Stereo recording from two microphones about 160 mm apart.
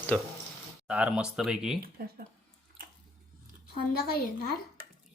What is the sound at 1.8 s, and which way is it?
Speech, 65° right (ahead or behind).